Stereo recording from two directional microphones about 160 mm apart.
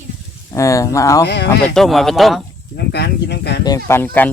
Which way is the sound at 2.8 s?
90° left.